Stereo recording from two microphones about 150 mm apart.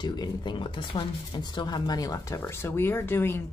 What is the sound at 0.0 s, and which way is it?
A woman's voice, 30° left (ahead or behind).